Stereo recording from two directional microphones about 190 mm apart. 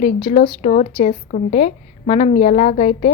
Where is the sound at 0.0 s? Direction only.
40° left (ahead or behind).